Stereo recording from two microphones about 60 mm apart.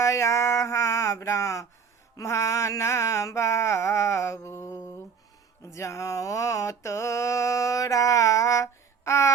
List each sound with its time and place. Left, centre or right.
0.0 s a sound: left
2.1 s mantra: left
5.7 s mantra: left